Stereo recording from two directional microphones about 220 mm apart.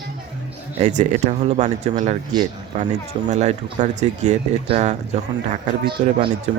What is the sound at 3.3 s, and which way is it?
Speech, 30° right (ahead or behind).